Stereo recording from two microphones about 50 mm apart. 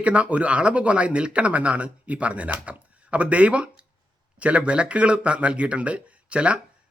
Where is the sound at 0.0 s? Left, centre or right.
Right.